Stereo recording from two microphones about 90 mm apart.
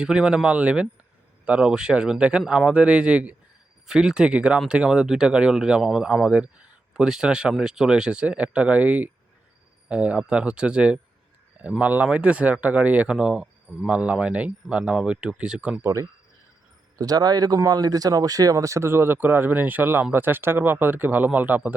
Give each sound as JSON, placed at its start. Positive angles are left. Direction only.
{"t": 0.0, "sound": "speech", "side_deg": -10}
{"t": 15.8, "sound": "speech", "side_deg": -35}
{"t": 17.0, "sound": "speech", "side_deg": -45}